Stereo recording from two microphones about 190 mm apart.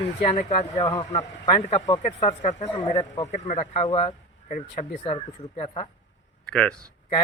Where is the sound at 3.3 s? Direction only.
35° left (ahead or behind).